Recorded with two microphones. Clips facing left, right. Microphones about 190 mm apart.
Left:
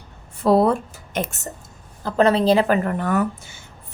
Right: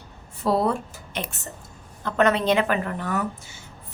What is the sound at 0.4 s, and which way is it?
Speech, 55° left (ahead or behind).